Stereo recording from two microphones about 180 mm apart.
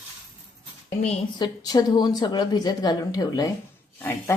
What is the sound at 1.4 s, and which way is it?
A woman's voice, 20° left (ahead or behind).